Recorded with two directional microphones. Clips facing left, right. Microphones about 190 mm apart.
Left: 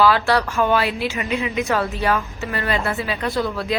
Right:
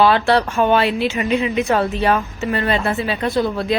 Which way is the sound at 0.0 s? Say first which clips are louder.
Right 2 dB; 25° right (ahead or behind).